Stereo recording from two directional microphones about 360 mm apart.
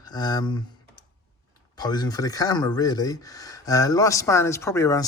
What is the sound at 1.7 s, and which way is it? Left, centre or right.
Speech, centre.